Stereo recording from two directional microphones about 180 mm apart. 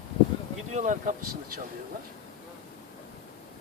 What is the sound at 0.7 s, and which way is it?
Speech, 45° right (ahead or behind).